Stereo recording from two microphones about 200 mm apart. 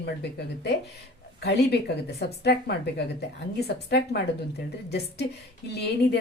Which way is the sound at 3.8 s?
55° left (ahead or behind).